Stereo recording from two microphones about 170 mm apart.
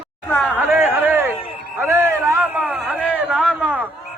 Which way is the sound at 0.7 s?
10° right (ahead or behind).